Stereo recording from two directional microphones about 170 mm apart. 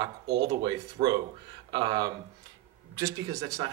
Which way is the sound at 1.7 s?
25° right (ahead or behind).